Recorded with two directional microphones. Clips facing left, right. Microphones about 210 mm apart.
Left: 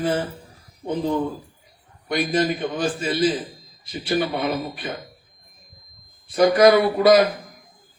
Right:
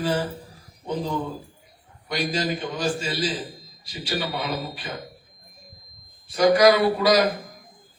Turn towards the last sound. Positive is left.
turn(degrees=55)  # may be behind; listen again after turning